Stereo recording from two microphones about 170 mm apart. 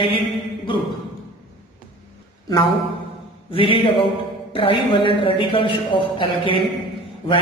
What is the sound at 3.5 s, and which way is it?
A man's voice, 30° left (ahead or behind).